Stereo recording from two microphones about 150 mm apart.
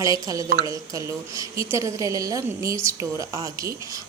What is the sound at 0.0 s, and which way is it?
Speech, 25° right (ahead or behind).